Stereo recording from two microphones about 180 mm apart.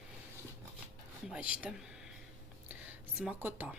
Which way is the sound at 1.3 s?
5° right (ahead or behind).